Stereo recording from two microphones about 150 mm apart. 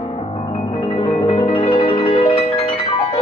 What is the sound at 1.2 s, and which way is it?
Music, 40° left (ahead or behind).